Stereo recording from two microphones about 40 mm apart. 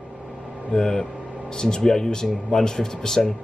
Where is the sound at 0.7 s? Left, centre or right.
Centre.